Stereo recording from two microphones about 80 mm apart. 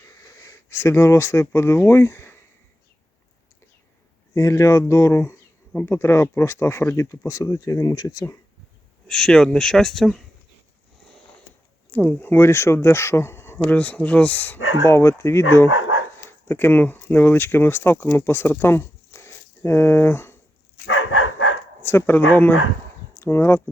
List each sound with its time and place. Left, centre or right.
0.0 s speech: left
4.4 s speech: left
9.0 s speech: centre
11.9 s speech: centre
13.7 s speech: centre
14.8 s speech: left
21.8 s speech: left